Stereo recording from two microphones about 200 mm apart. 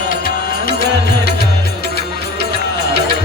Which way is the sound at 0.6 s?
60° right (ahead or behind).